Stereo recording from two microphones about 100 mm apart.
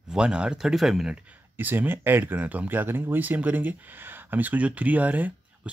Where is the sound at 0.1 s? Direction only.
10° right (ahead or behind).